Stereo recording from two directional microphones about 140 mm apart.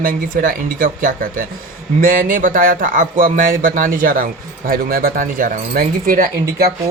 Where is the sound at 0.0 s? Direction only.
85° right.